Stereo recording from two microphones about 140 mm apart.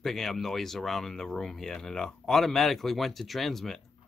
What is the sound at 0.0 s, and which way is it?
Speech, centre (ahead or behind).